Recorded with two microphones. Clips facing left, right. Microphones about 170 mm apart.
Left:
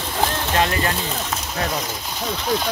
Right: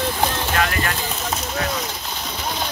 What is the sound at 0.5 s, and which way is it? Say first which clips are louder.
Speech: left 2 dB; 25° left (ahead or behind).